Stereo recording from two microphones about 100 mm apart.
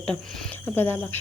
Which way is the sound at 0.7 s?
20° left (ahead or behind).